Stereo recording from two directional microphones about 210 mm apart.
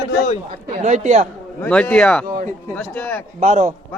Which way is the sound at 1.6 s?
5° left (ahead or behind).